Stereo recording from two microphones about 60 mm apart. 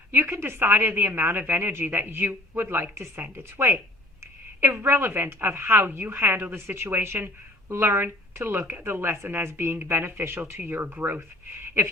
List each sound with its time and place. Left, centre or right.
0.1 s a woman's voice: right